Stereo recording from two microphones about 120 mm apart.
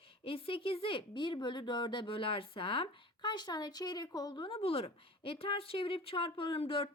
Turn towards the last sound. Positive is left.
turn(degrees=50)  # may be behind; listen again after turning